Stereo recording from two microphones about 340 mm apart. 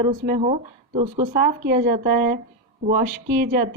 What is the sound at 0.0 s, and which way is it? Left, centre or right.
A woman's voice, right.